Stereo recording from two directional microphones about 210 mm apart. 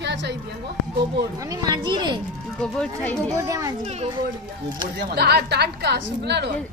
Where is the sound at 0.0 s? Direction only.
60° right (ahead or behind).